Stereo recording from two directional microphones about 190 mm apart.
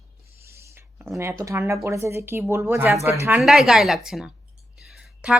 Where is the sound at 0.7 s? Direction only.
10° right (ahead or behind).